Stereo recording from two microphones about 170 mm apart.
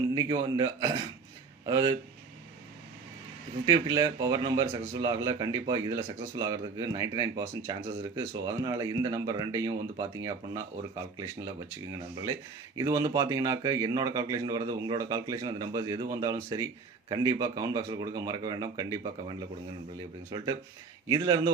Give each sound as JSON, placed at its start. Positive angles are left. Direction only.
{"t": 0.1, "sound": "speech", "side_deg": -20}
{"t": 3.7, "sound": "speech", "side_deg": -25}
{"t": 11.9, "sound": "speech", "side_deg": -20}